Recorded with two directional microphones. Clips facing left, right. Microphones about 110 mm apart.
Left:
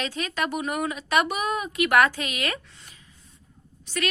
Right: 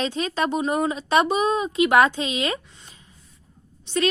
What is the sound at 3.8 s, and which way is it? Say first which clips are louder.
Speech: right 6 dB; 25° right (ahead or behind).